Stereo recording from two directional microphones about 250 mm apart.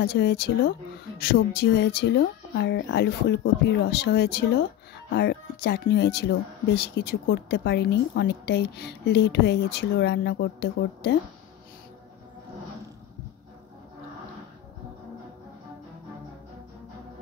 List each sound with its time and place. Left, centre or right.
0.0 s speech: left